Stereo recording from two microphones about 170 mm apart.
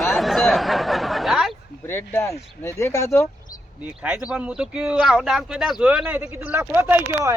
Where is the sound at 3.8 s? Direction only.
10° right (ahead or behind).